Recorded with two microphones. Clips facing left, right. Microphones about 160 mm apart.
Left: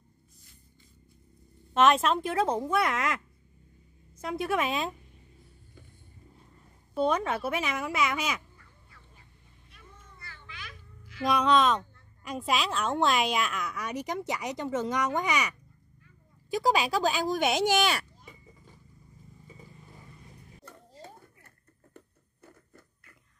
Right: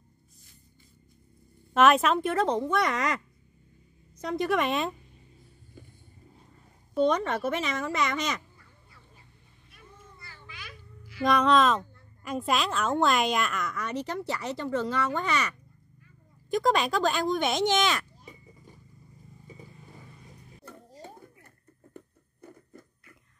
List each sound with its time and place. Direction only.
1.7 s speech: 5° right (ahead or behind)
4.2 s speech: 5° left (ahead or behind)
6.9 s a woman's voice: 5° left (ahead or behind)
11.2 s a woman's voice: centre (ahead or behind)
16.5 s a woman's voice: 5° left (ahead or behind)
20.6 s music: 15° right (ahead or behind)
22.7 s a sound: 20° right (ahead or behind)